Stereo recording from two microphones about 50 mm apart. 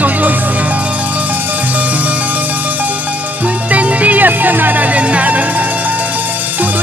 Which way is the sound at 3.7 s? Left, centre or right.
Right.